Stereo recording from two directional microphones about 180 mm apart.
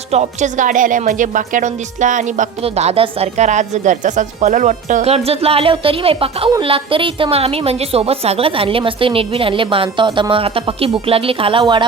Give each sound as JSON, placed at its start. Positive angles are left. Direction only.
{"t": 0.1, "sound": "a woman's voice", "side_deg": -40}